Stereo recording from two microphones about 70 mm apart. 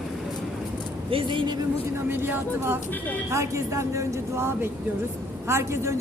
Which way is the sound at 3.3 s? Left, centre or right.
Right.